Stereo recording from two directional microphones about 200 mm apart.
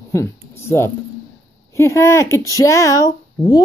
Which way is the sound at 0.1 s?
15° left (ahead or behind).